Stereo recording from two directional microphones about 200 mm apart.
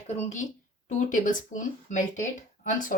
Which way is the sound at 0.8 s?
40° left (ahead or behind).